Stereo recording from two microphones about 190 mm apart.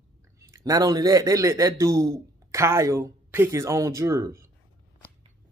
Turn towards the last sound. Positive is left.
turn(degrees=-15)  # may be behind; listen again after turning